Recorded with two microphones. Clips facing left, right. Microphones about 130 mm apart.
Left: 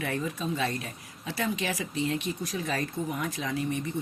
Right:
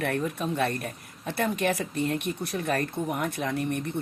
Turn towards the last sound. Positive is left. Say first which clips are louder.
# right 1 dB
turn(degrees=-60)  # may be behind; listen again after turning